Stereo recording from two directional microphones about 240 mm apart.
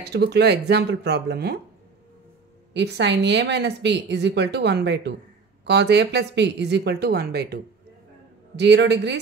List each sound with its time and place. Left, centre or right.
0.0 s speech: right
2.7 s speech: right